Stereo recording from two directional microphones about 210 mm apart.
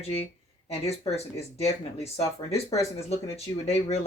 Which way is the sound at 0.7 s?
30° left (ahead or behind).